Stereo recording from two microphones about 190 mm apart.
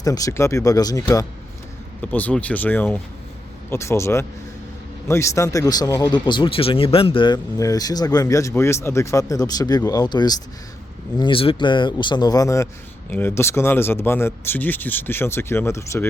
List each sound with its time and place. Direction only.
0.0 s speech: 20° left (ahead or behind)